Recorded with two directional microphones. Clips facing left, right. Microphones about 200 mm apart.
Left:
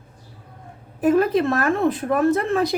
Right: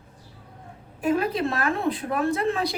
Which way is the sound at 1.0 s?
45° left (ahead or behind).